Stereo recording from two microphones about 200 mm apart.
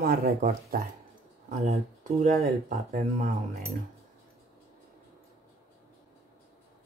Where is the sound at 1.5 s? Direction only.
35° right (ahead or behind).